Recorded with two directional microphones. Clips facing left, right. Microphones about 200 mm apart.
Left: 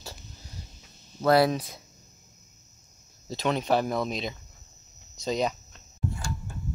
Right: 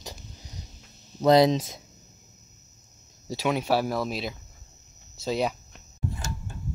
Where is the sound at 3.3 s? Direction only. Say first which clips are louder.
Right 1 dB; 10° right (ahead or behind).